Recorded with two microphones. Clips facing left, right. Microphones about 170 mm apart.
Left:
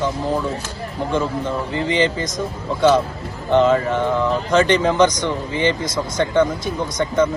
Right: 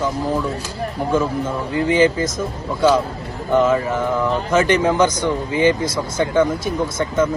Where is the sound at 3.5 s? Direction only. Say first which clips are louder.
Left 1 dB; 20° left (ahead or behind).